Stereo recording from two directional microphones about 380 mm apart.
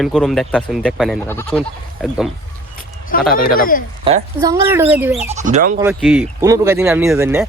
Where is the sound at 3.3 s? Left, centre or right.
Left.